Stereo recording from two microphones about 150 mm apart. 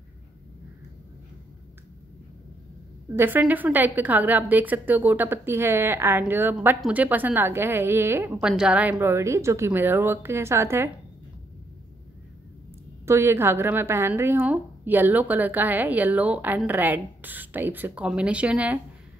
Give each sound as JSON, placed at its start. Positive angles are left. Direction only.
{"t": 3.2, "sound": "a woman's voice", "side_deg": -15}
{"t": 9.0, "sound": "a woman's voice", "side_deg": -20}
{"t": 13.0, "sound": "a woman's voice", "side_deg": -15}